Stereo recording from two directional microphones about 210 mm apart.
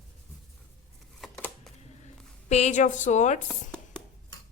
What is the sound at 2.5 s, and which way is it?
Speech, 30° left (ahead or behind).